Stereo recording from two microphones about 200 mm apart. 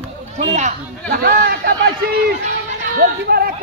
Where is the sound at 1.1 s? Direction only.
50° right (ahead or behind).